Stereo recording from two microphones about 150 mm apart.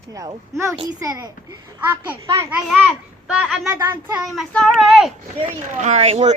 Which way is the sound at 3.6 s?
20° right (ahead or behind).